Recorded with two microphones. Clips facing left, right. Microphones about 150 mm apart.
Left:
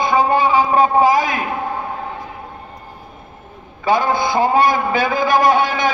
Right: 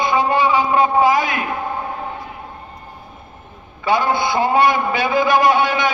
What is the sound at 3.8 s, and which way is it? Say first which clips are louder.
A man's voice: left 1 dB; 40° left (ahead or behind).